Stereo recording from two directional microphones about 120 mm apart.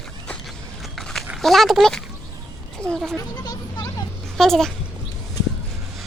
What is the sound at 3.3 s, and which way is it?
Vehicle, 35° left (ahead or behind).